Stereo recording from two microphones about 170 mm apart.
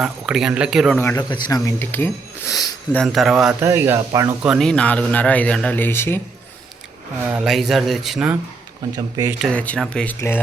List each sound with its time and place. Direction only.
0.0 s speech: 5° right (ahead or behind)
1.1 s speech: 20° left (ahead or behind)
2.9 s speech: 5° left (ahead or behind)
3.6 s speech: 15° right (ahead or behind)
4.4 s speech: centre (ahead or behind)
7.3 s speech: 5° right (ahead or behind)
8.9 s speech: 20° right (ahead or behind)
9.4 s speech: 5° left (ahead or behind)